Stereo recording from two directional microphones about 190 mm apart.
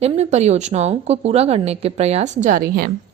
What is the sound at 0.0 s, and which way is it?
A woman's voice, 35° right (ahead or behind).